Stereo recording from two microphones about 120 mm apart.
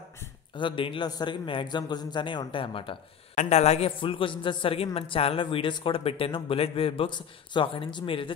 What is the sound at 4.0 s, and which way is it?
Speech, 45° left (ahead or behind).